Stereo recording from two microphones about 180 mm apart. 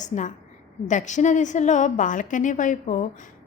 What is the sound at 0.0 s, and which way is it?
A woman's voice, 40° left (ahead or behind).